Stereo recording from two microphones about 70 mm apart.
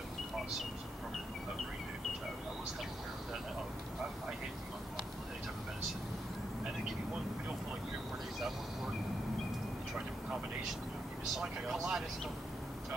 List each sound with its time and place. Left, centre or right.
11.3 s vehicle: centre